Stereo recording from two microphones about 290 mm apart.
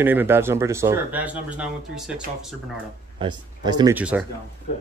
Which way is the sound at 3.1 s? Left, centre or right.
Centre.